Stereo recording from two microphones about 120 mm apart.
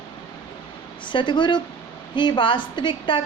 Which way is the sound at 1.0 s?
40° left (ahead or behind).